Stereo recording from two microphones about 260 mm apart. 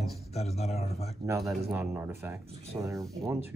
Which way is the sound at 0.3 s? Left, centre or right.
Left.